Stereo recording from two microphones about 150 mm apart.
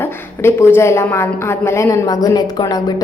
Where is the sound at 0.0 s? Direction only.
15° left (ahead or behind).